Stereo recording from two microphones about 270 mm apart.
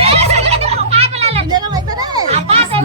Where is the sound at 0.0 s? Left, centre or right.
Right.